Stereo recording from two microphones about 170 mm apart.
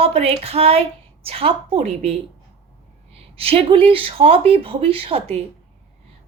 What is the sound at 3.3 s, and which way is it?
Speech, 35° right (ahead or behind).